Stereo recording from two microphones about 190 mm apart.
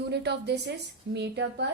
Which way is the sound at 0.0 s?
60° right (ahead or behind).